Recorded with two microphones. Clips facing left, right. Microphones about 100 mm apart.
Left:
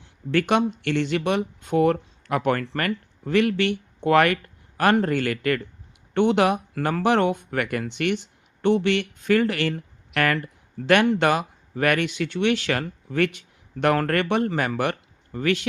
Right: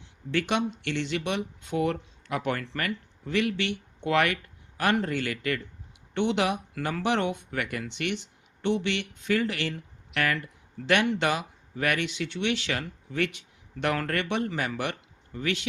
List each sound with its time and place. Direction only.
0.3 s speech: 50° left (ahead or behind)